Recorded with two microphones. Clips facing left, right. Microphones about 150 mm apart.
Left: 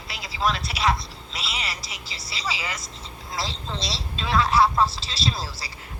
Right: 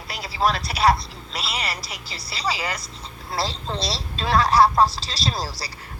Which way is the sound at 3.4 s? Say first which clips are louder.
Right 4 dB; 35° right (ahead or behind).